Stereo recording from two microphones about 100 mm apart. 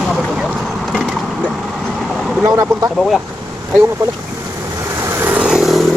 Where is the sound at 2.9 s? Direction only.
Centre (ahead or behind).